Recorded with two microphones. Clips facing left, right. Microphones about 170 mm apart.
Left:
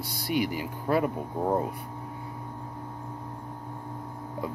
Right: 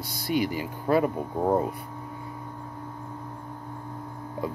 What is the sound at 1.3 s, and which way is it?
Speech, 10° right (ahead or behind).